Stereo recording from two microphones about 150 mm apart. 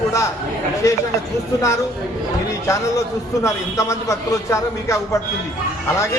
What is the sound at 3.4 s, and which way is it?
A man's voice, 20° left (ahead or behind).